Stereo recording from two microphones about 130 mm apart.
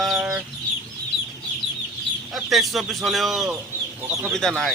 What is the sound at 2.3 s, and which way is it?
Speech, centre (ahead or behind).